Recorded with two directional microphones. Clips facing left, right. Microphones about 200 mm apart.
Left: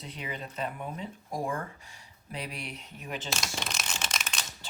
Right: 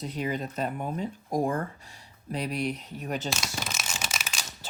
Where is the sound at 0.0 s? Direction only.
45° right (ahead or behind).